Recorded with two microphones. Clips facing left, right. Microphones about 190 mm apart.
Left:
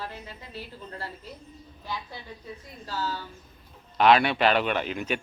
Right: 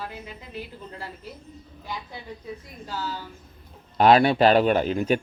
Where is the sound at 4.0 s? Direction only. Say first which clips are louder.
Right 4 dB; 40° right (ahead or behind).